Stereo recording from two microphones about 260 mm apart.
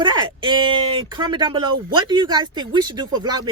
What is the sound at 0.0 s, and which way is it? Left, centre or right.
Speech, centre.